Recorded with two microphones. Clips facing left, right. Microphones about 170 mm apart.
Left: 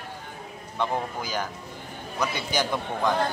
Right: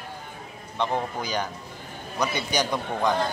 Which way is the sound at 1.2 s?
5° left (ahead or behind).